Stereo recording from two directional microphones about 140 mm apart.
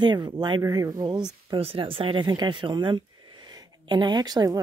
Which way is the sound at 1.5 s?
40° right (ahead or behind).